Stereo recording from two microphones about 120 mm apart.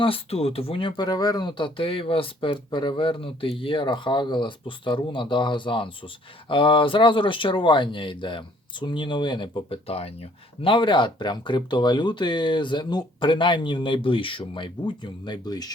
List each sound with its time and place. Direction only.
0.0 s speech: 55° left (ahead or behind)
10.6 s speech: 45° left (ahead or behind)